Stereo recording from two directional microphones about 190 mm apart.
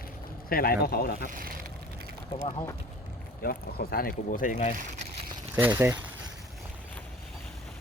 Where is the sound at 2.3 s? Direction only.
30° left (ahead or behind).